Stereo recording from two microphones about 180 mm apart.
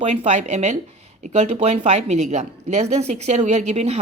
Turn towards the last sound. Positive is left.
turn(degrees=-35)  # may be behind; listen again after turning